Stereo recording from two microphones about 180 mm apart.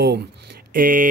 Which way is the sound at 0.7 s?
50° right (ahead or behind).